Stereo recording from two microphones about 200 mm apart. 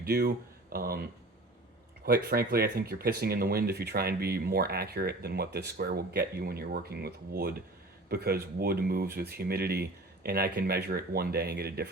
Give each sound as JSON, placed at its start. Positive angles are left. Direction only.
{"t": 0.0, "sound": "speech", "side_deg": -50}
{"t": 2.0, "sound": "speech", "side_deg": -50}